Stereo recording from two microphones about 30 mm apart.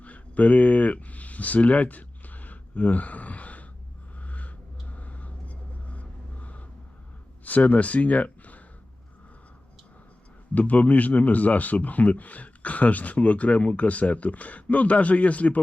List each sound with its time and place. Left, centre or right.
0.0 s a sound: left
4.2 s vehicle: left
7.4 s speech: left
10.5 s speech: left